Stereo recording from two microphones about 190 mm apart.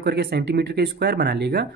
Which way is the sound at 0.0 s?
55° right (ahead or behind).